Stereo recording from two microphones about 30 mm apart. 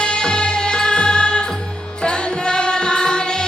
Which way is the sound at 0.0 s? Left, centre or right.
Left.